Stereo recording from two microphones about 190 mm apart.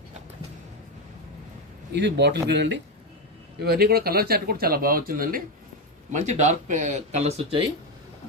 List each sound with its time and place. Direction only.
1.9 s speech: 65° right (ahead or behind)
6.1 s speech: 40° right (ahead or behind)